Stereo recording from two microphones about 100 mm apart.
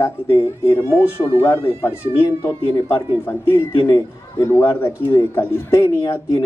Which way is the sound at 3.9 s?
30° left (ahead or behind).